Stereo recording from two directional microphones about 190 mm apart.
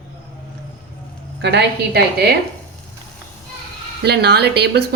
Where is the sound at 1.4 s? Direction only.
60° right (ahead or behind).